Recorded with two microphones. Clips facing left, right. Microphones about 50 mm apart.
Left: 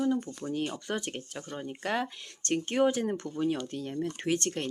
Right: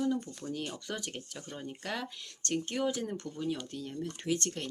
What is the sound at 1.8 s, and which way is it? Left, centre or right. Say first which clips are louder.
Speech: left 8 dB; left.